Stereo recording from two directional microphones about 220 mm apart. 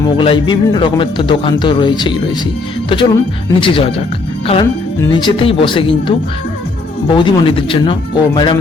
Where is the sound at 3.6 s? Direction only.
25° left (ahead or behind).